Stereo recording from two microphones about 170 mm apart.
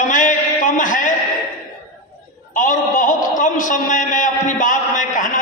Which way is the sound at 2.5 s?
50° left (ahead or behind).